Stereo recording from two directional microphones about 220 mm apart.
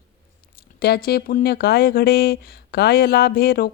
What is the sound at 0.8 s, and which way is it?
A woman's voice, 45° left (ahead or behind).